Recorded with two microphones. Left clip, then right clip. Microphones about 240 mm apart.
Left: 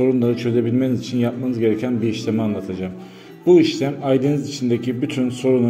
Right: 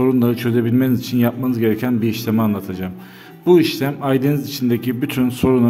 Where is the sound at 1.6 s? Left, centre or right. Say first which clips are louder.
Even; right.